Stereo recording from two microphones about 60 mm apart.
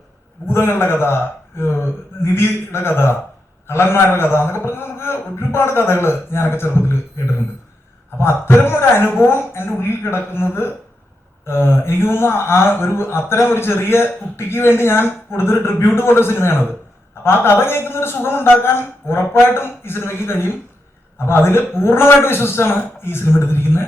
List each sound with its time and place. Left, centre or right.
0.4 s a man's voice: left
8.2 s a man's voice: left